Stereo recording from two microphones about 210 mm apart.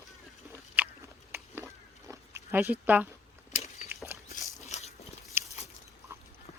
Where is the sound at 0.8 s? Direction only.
10° right (ahead or behind).